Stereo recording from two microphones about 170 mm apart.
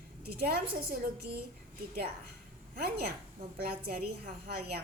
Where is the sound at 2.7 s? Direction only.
65° right (ahead or behind).